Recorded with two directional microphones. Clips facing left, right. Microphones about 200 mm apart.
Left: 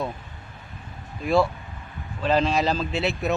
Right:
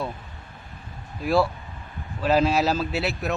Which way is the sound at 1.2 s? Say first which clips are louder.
Left 1 dB; centre (ahead or behind).